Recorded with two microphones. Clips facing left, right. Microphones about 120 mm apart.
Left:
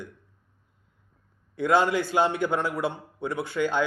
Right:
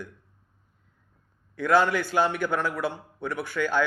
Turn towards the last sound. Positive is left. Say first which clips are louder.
# even
turn(degrees=20)  # may be behind; listen again after turning